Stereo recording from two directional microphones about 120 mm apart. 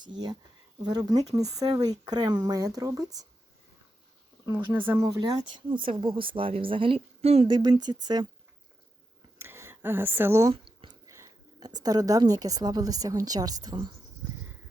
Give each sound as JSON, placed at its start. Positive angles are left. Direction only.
{"t": 0.1, "sound": "speech", "side_deg": -40}
{"t": 4.4, "sound": "speech", "side_deg": -20}
{"t": 5.0, "sound": "speech", "side_deg": -30}
{"t": 7.4, "sound": "speech", "side_deg": -40}
{"t": 9.4, "sound": "speech", "side_deg": -20}
{"t": 10.5, "sound": "a sound", "side_deg": -50}
{"t": 11.0, "sound": "a woman's voice", "side_deg": -25}